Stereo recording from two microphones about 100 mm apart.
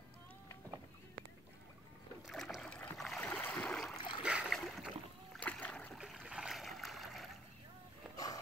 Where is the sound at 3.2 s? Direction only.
15° left (ahead or behind).